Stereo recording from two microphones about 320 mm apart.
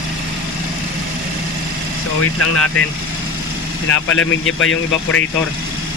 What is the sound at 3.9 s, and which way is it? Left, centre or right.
Speech, left.